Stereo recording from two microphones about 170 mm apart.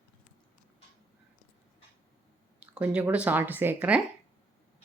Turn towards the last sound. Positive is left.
turn(degrees=-10)  # may be behind; listen again after turning